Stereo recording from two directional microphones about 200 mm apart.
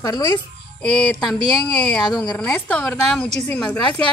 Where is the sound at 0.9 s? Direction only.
5° left (ahead or behind).